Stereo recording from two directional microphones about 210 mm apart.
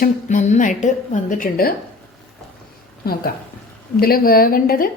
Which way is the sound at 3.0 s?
45° left (ahead or behind).